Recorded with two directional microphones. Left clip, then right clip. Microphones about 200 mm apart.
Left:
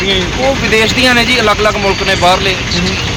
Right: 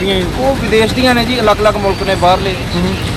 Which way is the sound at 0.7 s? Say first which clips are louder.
Left 2 dB; 5° right (ahead or behind).